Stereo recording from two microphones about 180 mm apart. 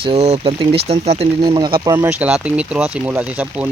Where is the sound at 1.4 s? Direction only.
25° right (ahead or behind).